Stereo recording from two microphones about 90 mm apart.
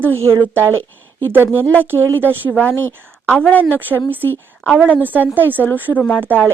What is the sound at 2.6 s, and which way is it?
A woman's voice, 20° left (ahead or behind).